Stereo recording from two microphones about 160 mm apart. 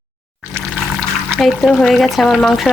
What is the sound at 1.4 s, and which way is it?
Speech, centre (ahead or behind).